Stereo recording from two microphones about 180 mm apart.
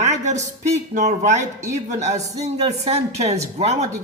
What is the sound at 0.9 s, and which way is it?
Speech, 40° right (ahead or behind).